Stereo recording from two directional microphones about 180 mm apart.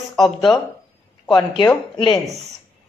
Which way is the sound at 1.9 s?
25° left (ahead or behind).